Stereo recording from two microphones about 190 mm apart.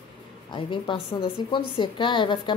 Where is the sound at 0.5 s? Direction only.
25° left (ahead or behind).